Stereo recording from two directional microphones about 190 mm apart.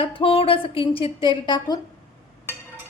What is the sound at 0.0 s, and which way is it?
A woman's voice, 30° left (ahead or behind).